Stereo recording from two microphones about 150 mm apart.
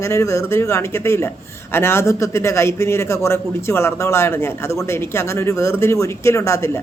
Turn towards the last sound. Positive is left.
turn(degrees=20)  # may be behind; listen again after turning